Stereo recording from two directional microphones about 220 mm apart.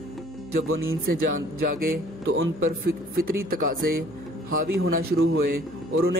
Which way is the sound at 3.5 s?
40° right (ahead or behind).